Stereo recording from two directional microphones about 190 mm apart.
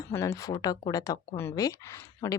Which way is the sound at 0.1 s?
15° left (ahead or behind).